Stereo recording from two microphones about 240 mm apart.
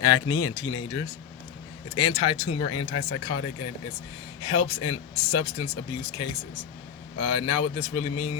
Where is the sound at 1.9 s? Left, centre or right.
Left.